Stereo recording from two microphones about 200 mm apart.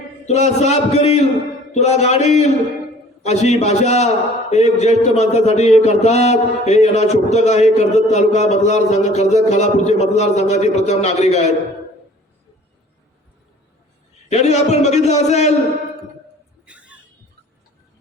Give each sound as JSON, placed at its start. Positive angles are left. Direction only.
{"t": 0.3, "sound": "a man's voice", "side_deg": 35}
{"t": 14.3, "sound": "a man's voice", "side_deg": 35}
{"t": 16.6, "sound": "a sound", "side_deg": -5}